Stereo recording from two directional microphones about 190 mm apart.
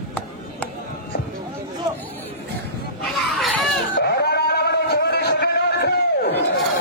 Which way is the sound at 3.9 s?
55° left (ahead or behind).